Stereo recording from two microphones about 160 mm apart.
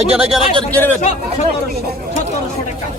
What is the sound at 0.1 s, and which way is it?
Speech, 35° right (ahead or behind).